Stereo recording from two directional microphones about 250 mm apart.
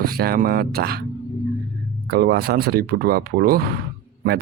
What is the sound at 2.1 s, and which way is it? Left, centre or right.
Speech, right.